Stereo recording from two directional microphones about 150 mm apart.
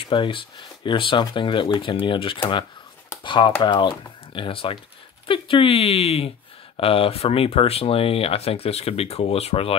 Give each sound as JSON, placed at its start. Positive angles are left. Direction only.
{"t": 0.0, "sound": "speech", "side_deg": 35}